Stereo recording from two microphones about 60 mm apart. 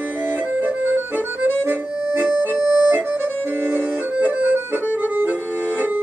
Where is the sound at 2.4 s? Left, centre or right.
Right.